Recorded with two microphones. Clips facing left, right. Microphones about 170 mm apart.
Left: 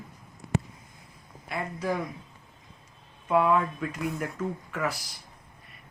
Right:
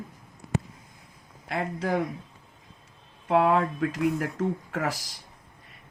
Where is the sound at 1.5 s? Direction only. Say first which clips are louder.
Right 3 dB; 75° right (ahead or behind).